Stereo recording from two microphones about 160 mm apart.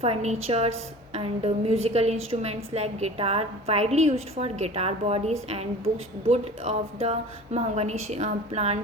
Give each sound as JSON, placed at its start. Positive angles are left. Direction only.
{"t": 0.0, "sound": "a woman's voice", "side_deg": -40}